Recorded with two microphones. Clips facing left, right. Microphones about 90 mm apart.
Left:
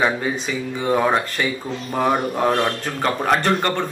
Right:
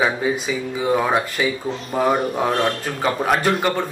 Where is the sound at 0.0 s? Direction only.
5° right (ahead or behind).